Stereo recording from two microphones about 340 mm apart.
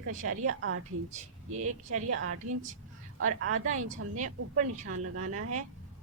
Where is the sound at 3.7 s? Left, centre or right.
Right.